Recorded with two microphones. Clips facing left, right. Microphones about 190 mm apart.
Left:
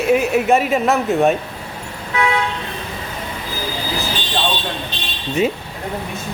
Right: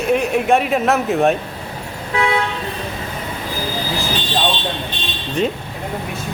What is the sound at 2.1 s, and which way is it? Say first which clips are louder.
Toot: even; 30° right (ahead or behind).